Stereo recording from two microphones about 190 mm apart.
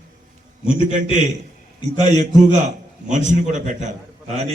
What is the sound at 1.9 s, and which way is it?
A man's voice, 35° right (ahead or behind).